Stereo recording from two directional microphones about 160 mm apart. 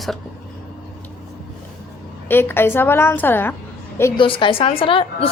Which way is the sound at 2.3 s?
15° left (ahead or behind).